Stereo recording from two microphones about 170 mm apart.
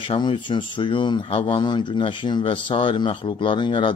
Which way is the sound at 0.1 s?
30° left (ahead or behind).